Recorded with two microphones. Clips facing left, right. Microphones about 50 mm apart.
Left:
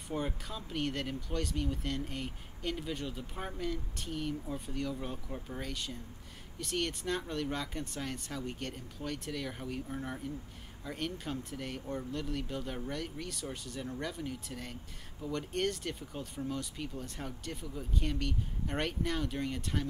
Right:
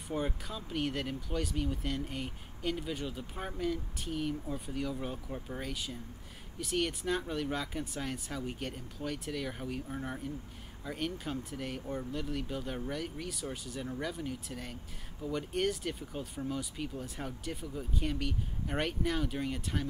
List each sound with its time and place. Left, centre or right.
0.1 s speech: centre